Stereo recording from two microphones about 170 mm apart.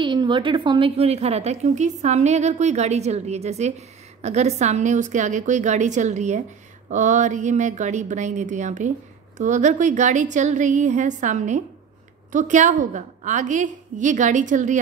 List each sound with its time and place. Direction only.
0.0 s a woman's voice: 25° right (ahead or behind); by 14.8 s 45° right (ahead or behind)